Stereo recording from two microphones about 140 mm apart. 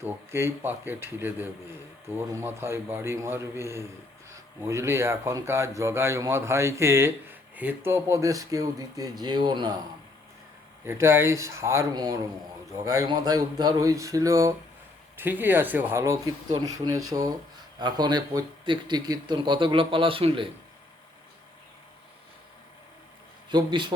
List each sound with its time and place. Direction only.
0.0 s a man's voice: 15° right (ahead or behind)
10.8 s a man's voice: 20° right (ahead or behind); by 20.5 s 40° right (ahead or behind)
23.5 s speech: 35° right (ahead or behind)